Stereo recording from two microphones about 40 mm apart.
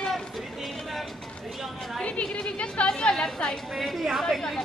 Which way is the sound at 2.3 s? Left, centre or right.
Left.